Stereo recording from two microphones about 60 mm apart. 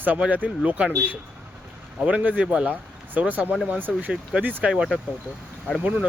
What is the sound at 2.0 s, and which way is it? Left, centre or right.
Speech, right.